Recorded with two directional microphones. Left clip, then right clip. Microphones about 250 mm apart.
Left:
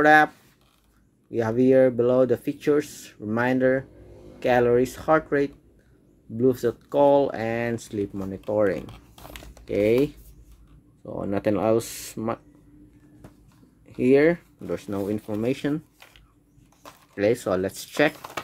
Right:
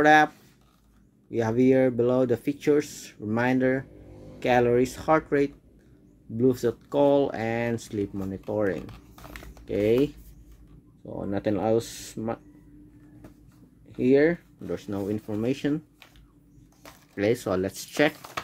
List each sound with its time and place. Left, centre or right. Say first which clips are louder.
0.0 s speech: left 2 dB; centre
1.3 s speech: left 3 dB; centre
13.9 s speech: left 2 dB; centre
16.8 s speech: left 3 dB; centre